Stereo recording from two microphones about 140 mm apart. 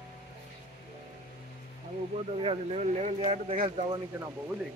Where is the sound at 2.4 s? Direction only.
45° right (ahead or behind).